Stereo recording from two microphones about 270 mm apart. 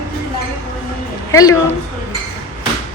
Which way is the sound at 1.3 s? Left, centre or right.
Centre.